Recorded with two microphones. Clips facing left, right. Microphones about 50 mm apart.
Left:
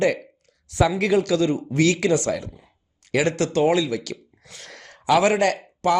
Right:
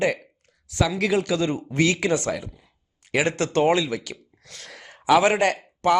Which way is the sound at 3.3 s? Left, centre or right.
Right.